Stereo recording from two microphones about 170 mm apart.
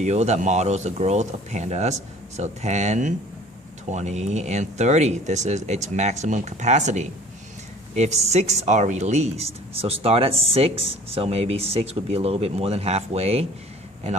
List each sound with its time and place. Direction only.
0.0 s a woman's voice: 40° right (ahead or behind)